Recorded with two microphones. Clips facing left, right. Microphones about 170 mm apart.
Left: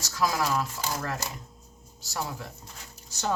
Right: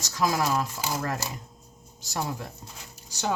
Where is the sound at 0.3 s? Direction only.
10° right (ahead or behind).